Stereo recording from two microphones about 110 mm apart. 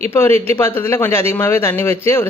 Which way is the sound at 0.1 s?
20° left (ahead or behind).